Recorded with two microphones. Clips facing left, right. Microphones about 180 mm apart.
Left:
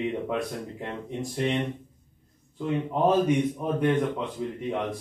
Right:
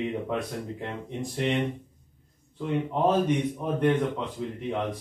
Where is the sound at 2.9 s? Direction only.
5° left (ahead or behind).